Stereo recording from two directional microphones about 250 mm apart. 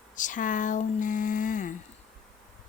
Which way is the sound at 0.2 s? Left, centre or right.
Left.